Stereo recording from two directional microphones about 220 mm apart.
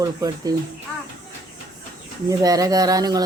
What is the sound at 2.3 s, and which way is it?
Speech, 15° right (ahead or behind).